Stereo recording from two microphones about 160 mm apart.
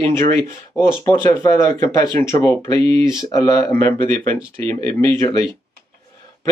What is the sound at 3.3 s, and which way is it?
A man's voice, 20° left (ahead or behind).